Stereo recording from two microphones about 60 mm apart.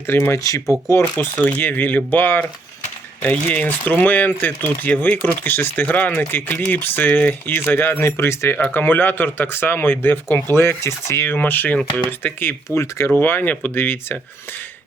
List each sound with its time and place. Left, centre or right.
0.3 s speech: left
1.4 s speech: left
8.5 s speech: left
11.3 s speech: left
12.7 s speech: left
13.1 s speech: left